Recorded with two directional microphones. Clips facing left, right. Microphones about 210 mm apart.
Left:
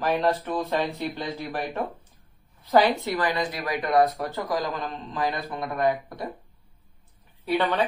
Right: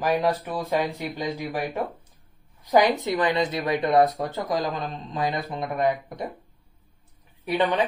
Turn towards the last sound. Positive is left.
turn(degrees=-20)  # may be behind; listen again after turning